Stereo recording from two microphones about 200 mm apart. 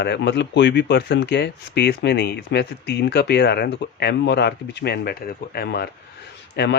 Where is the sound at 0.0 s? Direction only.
60° left (ahead or behind).